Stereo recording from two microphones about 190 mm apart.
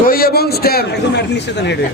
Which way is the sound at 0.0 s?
50° left (ahead or behind).